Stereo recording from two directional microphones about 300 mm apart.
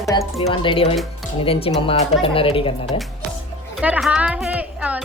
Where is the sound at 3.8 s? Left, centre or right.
Centre.